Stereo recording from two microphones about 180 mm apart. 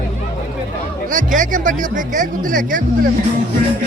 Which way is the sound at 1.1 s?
45° right (ahead or behind).